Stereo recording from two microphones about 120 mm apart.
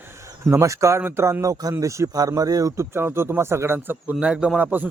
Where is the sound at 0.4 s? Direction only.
25° right (ahead or behind).